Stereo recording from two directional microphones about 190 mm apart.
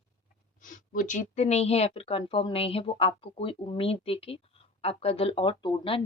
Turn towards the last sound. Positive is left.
turn(degrees=25)  # may be behind; listen again after turning